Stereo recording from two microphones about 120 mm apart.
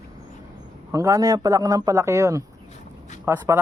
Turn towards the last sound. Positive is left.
turn(degrees=-20)  # may be behind; listen again after turning